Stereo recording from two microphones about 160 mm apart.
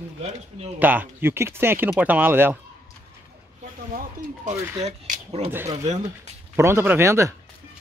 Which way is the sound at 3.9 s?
60° right (ahead or behind).